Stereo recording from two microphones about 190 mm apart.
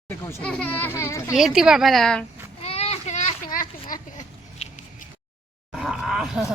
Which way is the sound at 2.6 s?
35° left (ahead or behind).